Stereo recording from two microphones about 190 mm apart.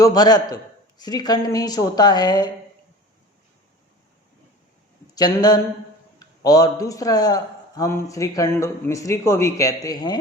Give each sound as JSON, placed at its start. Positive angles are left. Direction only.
{"t": 0.0, "sound": "a man's voice", "side_deg": 20}
{"t": 5.1, "sound": "a woman's voice", "side_deg": 20}